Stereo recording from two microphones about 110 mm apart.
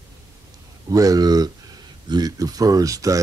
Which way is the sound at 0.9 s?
35° right (ahead or behind).